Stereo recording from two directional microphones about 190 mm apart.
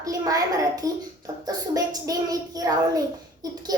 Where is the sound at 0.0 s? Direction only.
20° right (ahead or behind).